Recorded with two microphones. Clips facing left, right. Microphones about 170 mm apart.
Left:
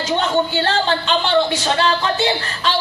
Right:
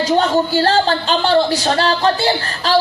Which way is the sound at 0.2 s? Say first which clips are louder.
Right 4 dB; 35° right (ahead or behind).